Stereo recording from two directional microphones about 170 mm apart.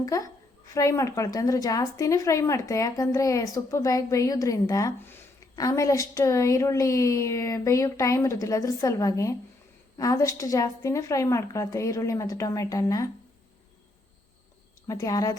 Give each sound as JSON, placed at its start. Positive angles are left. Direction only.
{"t": 0.0, "sound": "a woman's voice", "side_deg": 20}
{"t": 14.8, "sound": "a woman's voice", "side_deg": 20}